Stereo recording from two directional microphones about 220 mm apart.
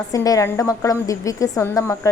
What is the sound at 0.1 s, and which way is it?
A woman's voice, 15° left (ahead or behind).